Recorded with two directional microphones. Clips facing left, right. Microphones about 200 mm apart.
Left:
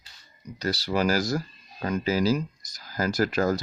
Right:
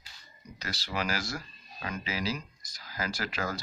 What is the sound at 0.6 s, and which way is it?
Speech, 40° left (ahead or behind).